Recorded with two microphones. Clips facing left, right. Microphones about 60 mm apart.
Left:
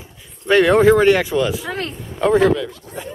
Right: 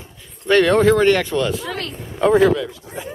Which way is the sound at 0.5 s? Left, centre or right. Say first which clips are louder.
Left 2 dB; centre.